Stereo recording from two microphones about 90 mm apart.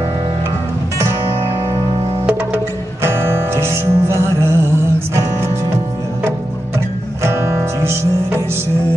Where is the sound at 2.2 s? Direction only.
25° right (ahead or behind).